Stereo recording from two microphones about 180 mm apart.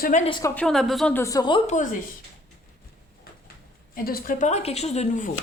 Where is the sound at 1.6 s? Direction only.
45° left (ahead or behind).